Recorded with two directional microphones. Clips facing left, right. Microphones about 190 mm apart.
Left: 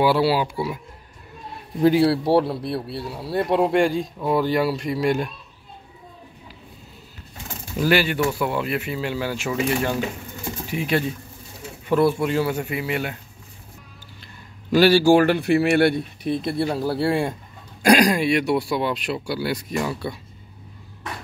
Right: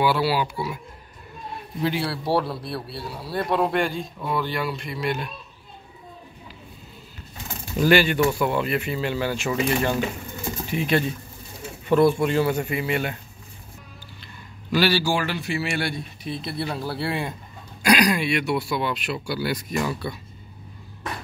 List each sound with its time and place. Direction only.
0.0 s a man's voice: 30° left (ahead or behind)
1.8 s a man's voice: 40° left (ahead or behind)
2.2 s a man's voice: 20° left (ahead or behind); by 5.3 s 45° left (ahead or behind)
7.8 s speech: 10° left (ahead or behind)
14.7 s a man's voice: 45° left (ahead or behind); by 20.2 s 30° left (ahead or behind)